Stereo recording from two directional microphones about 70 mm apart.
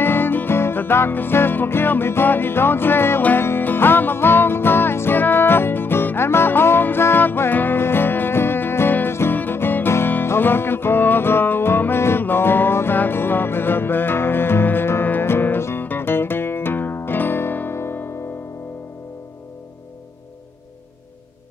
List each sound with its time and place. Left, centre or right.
0.0 s music: left